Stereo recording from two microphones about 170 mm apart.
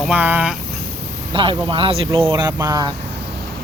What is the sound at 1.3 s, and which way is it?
Speech, 30° right (ahead or behind).